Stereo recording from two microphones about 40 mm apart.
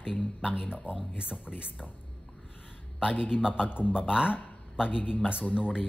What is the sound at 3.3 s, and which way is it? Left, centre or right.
Speech, centre.